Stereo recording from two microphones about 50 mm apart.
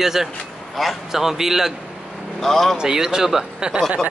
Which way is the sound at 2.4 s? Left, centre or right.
Centre.